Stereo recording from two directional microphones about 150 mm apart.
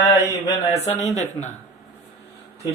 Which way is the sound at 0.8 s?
50° left (ahead or behind).